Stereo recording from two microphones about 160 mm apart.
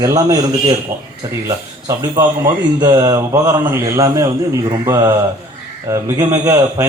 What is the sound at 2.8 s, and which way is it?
A man's voice, 25° right (ahead or behind).